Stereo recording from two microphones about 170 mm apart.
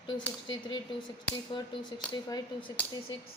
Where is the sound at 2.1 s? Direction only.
30° left (ahead or behind).